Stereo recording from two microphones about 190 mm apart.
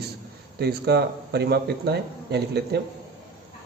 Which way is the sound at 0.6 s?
60° right (ahead or behind).